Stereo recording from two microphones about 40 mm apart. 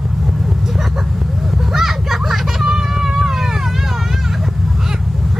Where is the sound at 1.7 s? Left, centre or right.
Centre.